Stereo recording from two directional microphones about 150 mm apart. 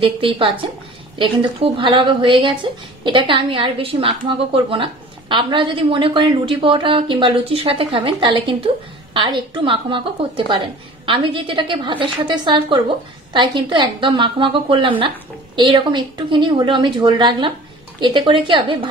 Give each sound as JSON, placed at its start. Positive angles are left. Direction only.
{"t": 0.0, "sound": "speech", "side_deg": -35}